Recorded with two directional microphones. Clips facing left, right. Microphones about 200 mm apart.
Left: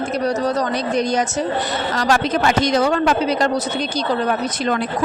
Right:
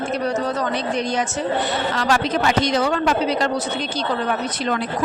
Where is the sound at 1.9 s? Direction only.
45° left (ahead or behind).